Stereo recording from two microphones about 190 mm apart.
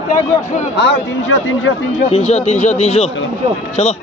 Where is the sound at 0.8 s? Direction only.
75° left (ahead or behind).